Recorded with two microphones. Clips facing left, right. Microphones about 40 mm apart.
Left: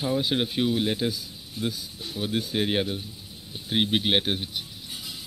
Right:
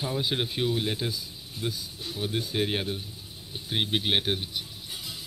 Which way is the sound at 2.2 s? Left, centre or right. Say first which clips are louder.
Left 2 dB; centre.